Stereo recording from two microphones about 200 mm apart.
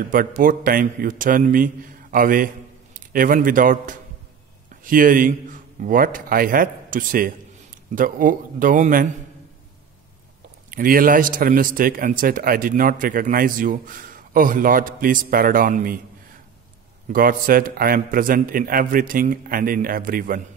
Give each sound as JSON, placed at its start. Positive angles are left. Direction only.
{"t": 0.1, "sound": "a man's voice", "side_deg": -45}
{"t": 10.7, "sound": "a man's voice", "side_deg": -45}
{"t": 17.1, "sound": "a man's voice", "side_deg": -45}